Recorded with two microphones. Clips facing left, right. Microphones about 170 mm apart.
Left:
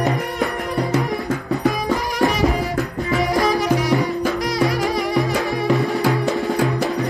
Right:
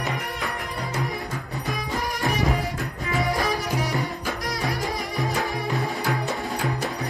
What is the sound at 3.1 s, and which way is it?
Music, 90° left.